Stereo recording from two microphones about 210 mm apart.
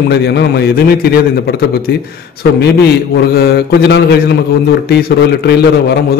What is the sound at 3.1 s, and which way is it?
A man's voice, 50° left (ahead or behind).